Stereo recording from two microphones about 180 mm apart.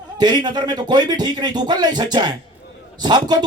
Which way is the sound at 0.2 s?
25° right (ahead or behind).